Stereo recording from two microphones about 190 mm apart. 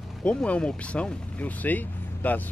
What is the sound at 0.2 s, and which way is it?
Speech, 5° left (ahead or behind).